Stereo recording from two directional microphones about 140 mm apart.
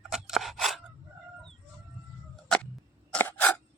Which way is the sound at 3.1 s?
10° left (ahead or behind).